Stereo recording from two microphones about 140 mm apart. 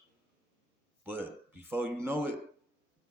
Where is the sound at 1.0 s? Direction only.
15° right (ahead or behind).